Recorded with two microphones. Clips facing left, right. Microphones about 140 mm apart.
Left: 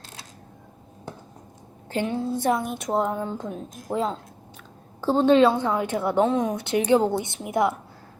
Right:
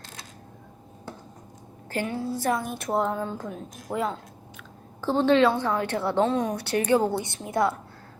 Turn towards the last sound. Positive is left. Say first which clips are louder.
# left 2 dB
turn(degrees=15)  # may be behind; listen again after turning